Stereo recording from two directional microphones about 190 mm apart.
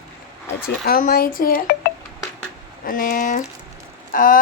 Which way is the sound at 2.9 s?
45° left (ahead or behind).